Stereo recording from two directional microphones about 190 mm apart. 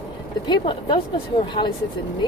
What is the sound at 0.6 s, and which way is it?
A woman's voice, 25° left (ahead or behind).